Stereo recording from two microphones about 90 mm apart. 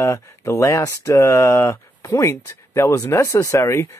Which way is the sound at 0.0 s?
35° left (ahead or behind).